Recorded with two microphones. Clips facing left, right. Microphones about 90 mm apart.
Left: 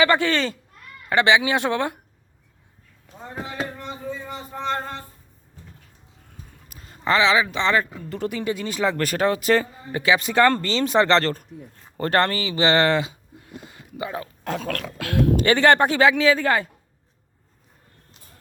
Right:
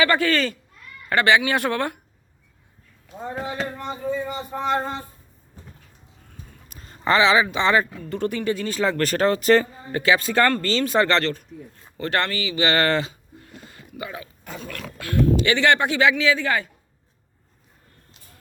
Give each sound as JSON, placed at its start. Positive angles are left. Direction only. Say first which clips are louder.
{"t": 0.0, "sound": "speech", "louder": "left 1 dB", "side_deg": 25}
{"t": 3.1, "sound": "speech", "louder": "right 4 dB", "side_deg": -10}
{"t": 6.7, "sound": "speech", "louder": "right 1 dB", "side_deg": 5}
{"t": 8.1, "sound": "speech", "louder": "right 2 dB", "side_deg": 5}
{"t": 8.4, "sound": "speech", "louder": "left 1 dB", "side_deg": 15}
{"t": 11.2, "sound": "speech", "louder": "left 1 dB", "side_deg": 40}
{"t": 14.4, "sound": "dog", "louder": "left 9 dB", "side_deg": 75}
{"t": 15.4, "sound": "speech", "louder": "left 6 dB", "side_deg": 40}